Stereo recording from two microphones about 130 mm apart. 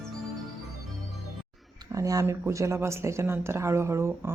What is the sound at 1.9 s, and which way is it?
Speech, 25° right (ahead or behind).